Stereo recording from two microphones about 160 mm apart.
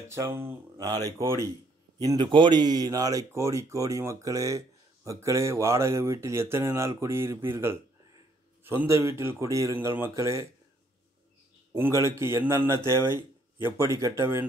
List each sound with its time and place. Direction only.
0.1 s speech: 15° right (ahead or behind)
11.7 s speech: 15° right (ahead or behind)